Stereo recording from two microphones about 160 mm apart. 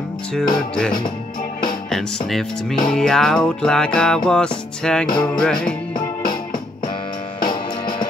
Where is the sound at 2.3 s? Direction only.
Centre (ahead or behind).